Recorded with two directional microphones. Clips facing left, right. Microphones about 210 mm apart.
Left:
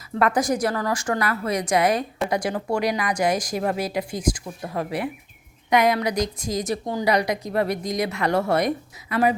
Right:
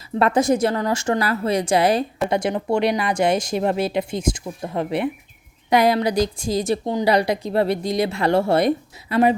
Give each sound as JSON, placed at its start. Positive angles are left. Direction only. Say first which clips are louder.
{"t": 0.1, "sound": "a woman's voice", "louder": "right 4 dB", "side_deg": -25}